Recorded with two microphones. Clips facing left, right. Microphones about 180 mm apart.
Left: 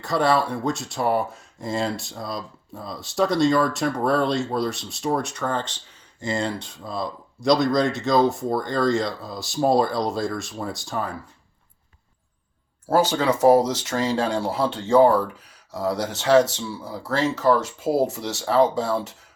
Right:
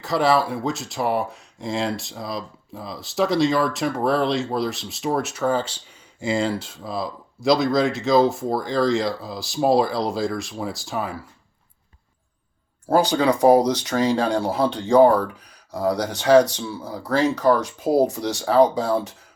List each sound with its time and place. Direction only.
0.0 s speech: centre (ahead or behind)
13.3 s speech: 5° left (ahead or behind)